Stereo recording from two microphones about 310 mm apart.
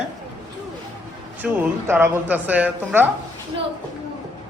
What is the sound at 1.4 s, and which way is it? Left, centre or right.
Speech, centre.